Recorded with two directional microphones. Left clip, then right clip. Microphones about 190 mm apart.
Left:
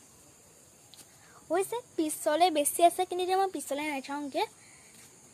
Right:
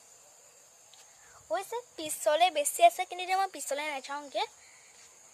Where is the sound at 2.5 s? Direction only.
Centre (ahead or behind).